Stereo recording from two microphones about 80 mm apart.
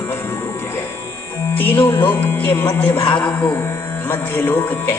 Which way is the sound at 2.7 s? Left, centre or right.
Centre.